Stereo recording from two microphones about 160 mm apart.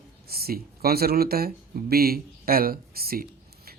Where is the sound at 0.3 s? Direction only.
70° right (ahead or behind).